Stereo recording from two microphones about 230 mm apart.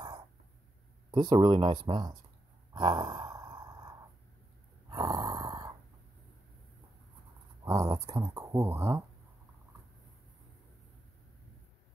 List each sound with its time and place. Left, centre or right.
1.1 s speech: centre
2.7 s a sound: centre
4.8 s snoring: centre
7.6 s speech: centre